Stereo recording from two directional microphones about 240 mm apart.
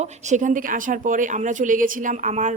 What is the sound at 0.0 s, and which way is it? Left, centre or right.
Speech, right.